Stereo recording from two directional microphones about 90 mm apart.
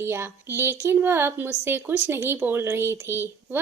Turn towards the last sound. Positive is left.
turn(degrees=-25)  # may be behind; listen again after turning